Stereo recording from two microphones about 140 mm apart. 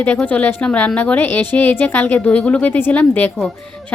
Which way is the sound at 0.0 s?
10° left (ahead or behind).